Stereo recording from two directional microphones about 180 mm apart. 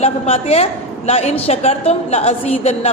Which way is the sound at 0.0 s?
35° left (ahead or behind).